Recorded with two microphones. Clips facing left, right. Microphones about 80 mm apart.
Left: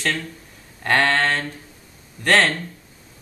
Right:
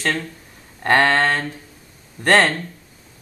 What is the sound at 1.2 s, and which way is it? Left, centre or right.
Mantra, centre.